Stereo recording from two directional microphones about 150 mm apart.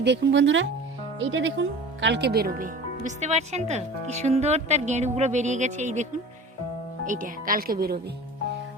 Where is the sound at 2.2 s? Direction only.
90° right.